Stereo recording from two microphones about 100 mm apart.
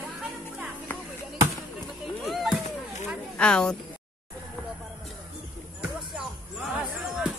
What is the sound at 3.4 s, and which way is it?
Speech, 10° left (ahead or behind).